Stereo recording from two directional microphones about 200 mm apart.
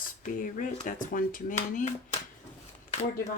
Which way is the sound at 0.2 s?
40° left (ahead or behind).